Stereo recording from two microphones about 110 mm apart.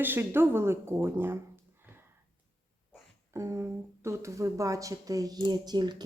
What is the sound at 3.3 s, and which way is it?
Speech, 25° right (ahead or behind).